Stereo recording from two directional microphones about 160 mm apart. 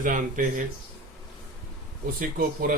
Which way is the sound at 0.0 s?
55° right (ahead or behind).